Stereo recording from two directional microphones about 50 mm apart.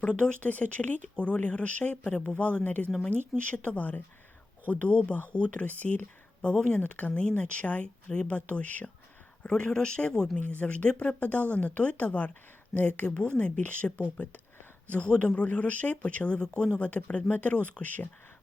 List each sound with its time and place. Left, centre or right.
0.0 s a woman's voice: left
3.4 s speech: left
3.8 s a woman's voice: left
6.5 s speech: left
9.5 s speech: centre
10.5 s a woman's voice: left
13.1 s speech: left
14.8 s a woman's voice: left